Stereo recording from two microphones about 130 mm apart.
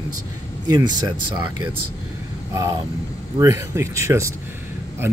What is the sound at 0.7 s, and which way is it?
Speech, 35° right (ahead or behind).